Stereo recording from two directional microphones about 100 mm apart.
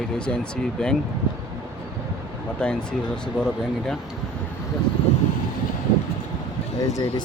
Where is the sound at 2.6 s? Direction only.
10° left (ahead or behind).